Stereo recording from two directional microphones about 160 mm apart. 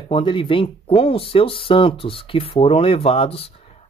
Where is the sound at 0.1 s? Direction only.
30° left (ahead or behind).